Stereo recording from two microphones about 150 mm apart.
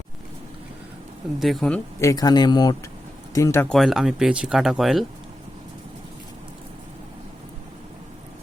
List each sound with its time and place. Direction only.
1.4 s speech: centre (ahead or behind)
2.0 s speech: 20° left (ahead or behind)
3.7 s speech: centre (ahead or behind)